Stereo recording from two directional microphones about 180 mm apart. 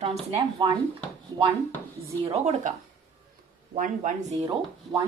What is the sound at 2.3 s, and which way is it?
Speech, 40° right (ahead or behind).